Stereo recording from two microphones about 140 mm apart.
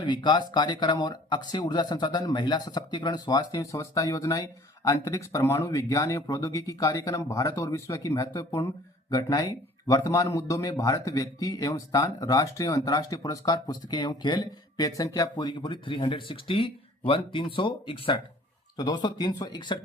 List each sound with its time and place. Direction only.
0.0 s speech: 30° left (ahead or behind)